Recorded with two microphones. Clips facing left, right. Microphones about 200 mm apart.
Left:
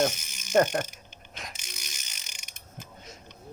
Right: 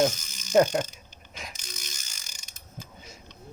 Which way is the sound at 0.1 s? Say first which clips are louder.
Right 1 dB; 15° left (ahead or behind).